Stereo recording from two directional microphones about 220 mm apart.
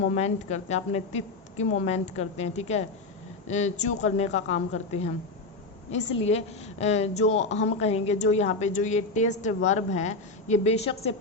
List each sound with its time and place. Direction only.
0.0 s a woman's voice: 30° left (ahead or behind)